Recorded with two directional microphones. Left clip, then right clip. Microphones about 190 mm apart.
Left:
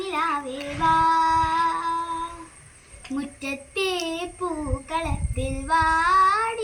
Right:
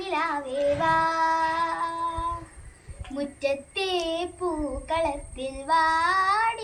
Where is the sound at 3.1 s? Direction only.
30° right (ahead or behind).